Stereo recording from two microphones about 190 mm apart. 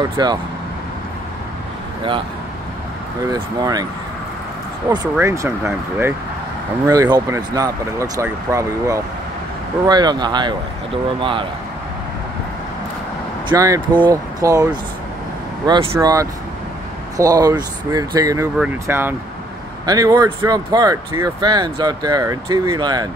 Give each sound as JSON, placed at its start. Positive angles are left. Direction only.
{"t": 0.0, "sound": "speech", "side_deg": -20}
{"t": 3.3, "sound": "speech", "side_deg": -20}
{"t": 4.8, "sound": "speech", "side_deg": -20}
{"t": 13.5, "sound": "speech", "side_deg": -15}